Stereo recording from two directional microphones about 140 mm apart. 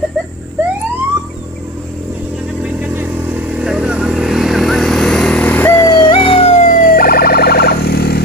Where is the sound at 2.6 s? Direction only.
10° right (ahead or behind).